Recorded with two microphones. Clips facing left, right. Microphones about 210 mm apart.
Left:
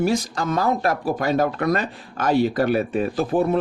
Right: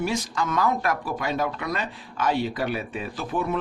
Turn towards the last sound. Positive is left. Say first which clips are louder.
# left 7 dB
turn(degrees=35)  # may be behind; listen again after turning